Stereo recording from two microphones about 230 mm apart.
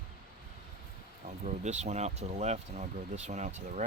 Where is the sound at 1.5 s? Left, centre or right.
Right.